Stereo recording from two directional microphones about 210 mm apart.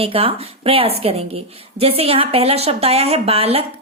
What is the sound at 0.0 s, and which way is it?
A woman's voice, 25° right (ahead or behind).